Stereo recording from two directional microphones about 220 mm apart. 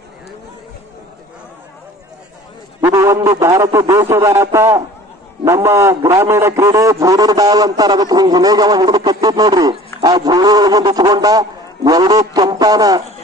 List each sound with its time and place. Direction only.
2.8 s a man's voice: 15° right (ahead or behind)